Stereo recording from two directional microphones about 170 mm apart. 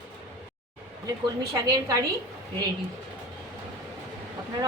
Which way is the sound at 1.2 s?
25° right (ahead or behind).